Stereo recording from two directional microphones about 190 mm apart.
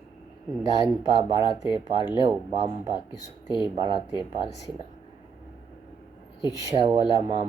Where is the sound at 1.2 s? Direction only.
25° right (ahead or behind).